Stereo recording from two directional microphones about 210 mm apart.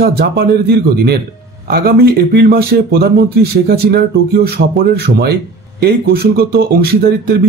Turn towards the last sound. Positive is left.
turn(degrees=-45)  # may be behind; listen again after turning